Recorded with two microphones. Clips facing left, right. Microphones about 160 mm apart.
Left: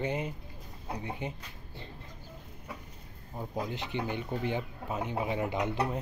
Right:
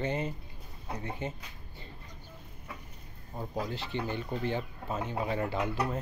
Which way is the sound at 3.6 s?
15° left (ahead or behind).